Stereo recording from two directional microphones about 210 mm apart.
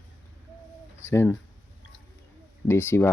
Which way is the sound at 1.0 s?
10° left (ahead or behind).